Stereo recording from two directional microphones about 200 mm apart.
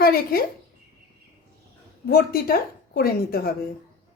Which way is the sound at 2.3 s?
50° left (ahead or behind).